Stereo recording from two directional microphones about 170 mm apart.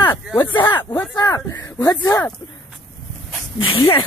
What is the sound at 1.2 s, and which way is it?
Speech, 20° left (ahead or behind).